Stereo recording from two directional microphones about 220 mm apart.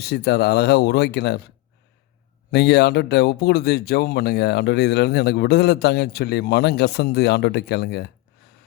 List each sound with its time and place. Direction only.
0.0 s speech: 45° left (ahead or behind)
2.5 s speech: 50° left (ahead or behind)